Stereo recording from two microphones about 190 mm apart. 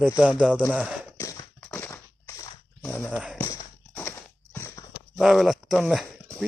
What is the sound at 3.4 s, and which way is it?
Clip-clop, 15° left (ahead or behind).